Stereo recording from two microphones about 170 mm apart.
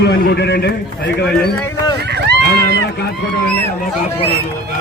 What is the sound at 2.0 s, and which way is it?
Run, 80° right.